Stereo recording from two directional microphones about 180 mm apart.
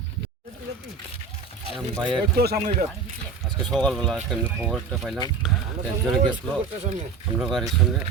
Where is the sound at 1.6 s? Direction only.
30° right (ahead or behind).